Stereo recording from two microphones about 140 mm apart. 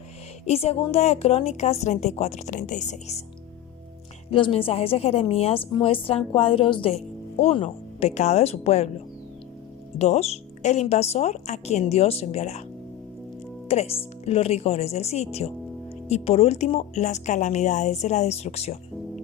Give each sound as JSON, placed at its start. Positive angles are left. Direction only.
{"t": 0.4, "sound": "a woman's voice", "side_deg": 45}
{"t": 4.3, "sound": "a woman's voice", "side_deg": 40}
{"t": 10.0, "sound": "a woman's voice", "side_deg": 50}
{"t": 13.7, "sound": "a woman's voice", "side_deg": 45}